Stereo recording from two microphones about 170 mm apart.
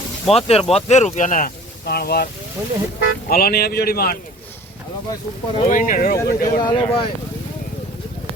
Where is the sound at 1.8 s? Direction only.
65° left (ahead or behind).